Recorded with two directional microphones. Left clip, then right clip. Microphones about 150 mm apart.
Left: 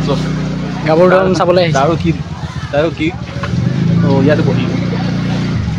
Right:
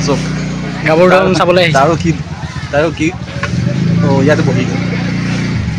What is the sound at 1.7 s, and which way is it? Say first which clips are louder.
Speech: right 3 dB; 20° right (ahead or behind).